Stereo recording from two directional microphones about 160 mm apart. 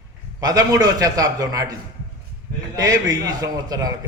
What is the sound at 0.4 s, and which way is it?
A man's voice, 25° right (ahead or behind).